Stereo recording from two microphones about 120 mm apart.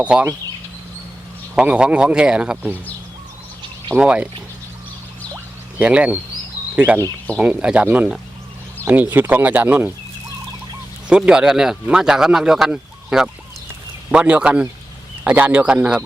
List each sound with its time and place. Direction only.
0.0 s speech: 10° right (ahead or behind)
1.5 s speech: 10° right (ahead or behind)
3.9 s speech: 10° right (ahead or behind)
5.8 s speech: 10° right (ahead or behind)
11.1 s speech: 5° right (ahead or behind)